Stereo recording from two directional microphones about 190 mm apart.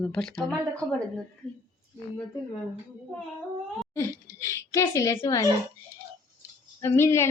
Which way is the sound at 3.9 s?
15° left (ahead or behind).